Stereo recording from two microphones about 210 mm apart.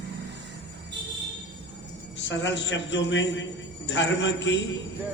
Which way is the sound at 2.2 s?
60° left (ahead or behind).